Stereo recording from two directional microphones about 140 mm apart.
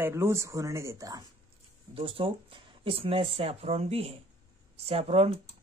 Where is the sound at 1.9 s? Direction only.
40° right (ahead or behind).